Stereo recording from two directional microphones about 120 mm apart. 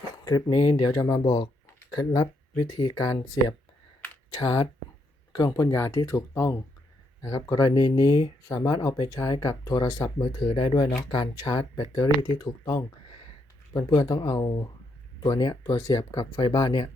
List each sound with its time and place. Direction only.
0.3 s speech: 35° left (ahead or behind)
4.4 s speech: 45° left (ahead or behind)
5.3 s speech: 30° left (ahead or behind)
14.0 s speech: 30° left (ahead or behind)